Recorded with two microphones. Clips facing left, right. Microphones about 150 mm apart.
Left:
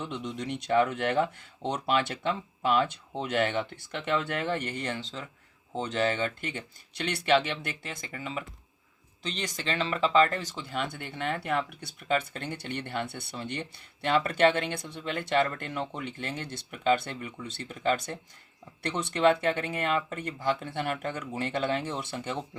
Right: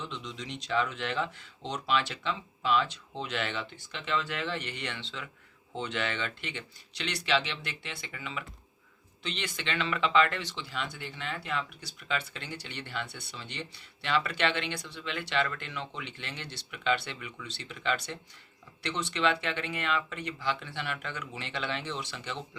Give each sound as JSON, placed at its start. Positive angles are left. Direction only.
{"t": 0.0, "sound": "speech", "side_deg": 55}